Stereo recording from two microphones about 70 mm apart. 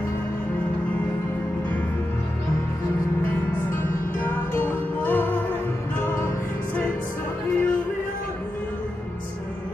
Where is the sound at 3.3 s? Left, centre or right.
Left.